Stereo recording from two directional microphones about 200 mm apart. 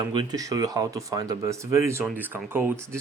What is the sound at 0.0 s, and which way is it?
Speech, 20° right (ahead or behind).